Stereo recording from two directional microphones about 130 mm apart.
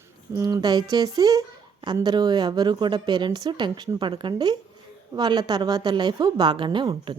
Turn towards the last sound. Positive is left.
turn(degrees=-40)  # may be behind; listen again after turning